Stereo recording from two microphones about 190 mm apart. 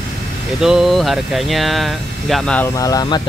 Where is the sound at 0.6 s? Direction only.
Centre (ahead or behind).